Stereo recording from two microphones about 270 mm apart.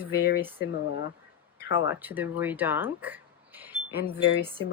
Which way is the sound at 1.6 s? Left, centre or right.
Left.